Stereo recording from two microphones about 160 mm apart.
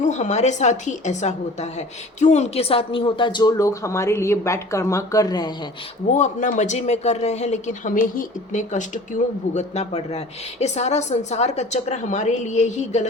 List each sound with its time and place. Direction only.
0.0 s a woman's voice: 45° left (ahead or behind); by 5.5 s 25° left (ahead or behind)
6.1 s speech: 50° left (ahead or behind)